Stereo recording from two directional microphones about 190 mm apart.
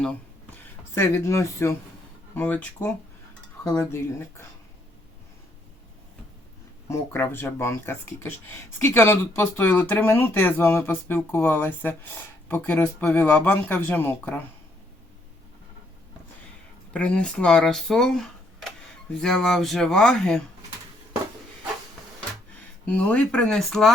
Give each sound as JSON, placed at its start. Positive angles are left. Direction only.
{"t": 0.5, "sound": "speech", "side_deg": 15}
{"t": 6.8, "sound": "speech", "side_deg": 15}
{"t": 16.9, "sound": "speech", "side_deg": 5}
{"t": 22.9, "sound": "speech", "side_deg": 5}